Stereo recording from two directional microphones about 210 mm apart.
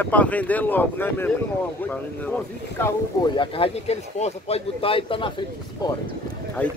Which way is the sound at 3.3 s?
25° left (ahead or behind).